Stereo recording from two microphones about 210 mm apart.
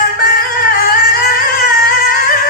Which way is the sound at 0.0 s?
40° left (ahead or behind).